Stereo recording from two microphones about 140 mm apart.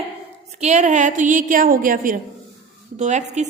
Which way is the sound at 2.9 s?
55° right (ahead or behind).